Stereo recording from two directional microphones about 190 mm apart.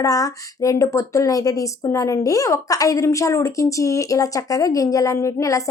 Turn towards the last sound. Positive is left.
turn(degrees=15)  # may be behind; listen again after turning